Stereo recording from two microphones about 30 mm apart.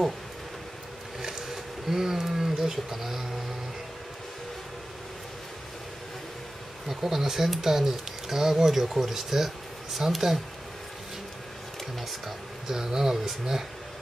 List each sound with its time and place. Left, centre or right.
1.5 s a sound: centre
6.9 s speech: centre
12.6 s speech: centre